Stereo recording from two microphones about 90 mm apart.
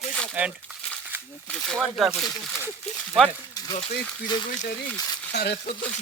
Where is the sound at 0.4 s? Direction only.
20° right (ahead or behind).